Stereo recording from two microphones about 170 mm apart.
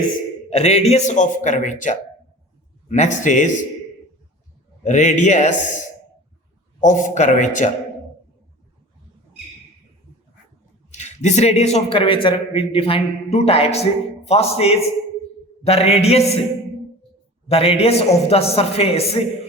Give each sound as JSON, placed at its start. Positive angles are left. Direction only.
{"t": 0.5, "sound": "a man's voice", "side_deg": 40}
{"t": 4.8, "sound": "a man's voice", "side_deg": 45}
{"t": 6.8, "sound": "a man's voice", "side_deg": 45}
{"t": 10.9, "sound": "a man's voice", "side_deg": 40}
{"t": 17.5, "sound": "a man's voice", "side_deg": 35}